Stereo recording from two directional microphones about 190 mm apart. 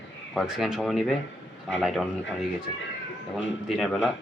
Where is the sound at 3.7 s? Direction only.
Centre (ahead or behind).